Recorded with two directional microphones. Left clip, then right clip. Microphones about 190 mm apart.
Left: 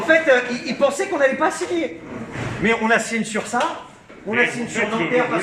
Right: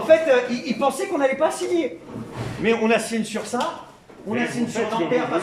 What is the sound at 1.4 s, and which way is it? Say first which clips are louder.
Speech: left 1 dB; 10° right (ahead or behind).